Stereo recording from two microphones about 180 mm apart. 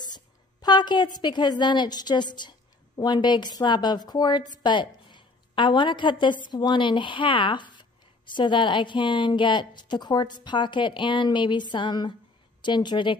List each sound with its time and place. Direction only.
0.0 s a woman's voice: 20° left (ahead or behind)